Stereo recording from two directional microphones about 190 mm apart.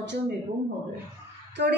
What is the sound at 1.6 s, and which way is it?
Speech, 65° right (ahead or behind).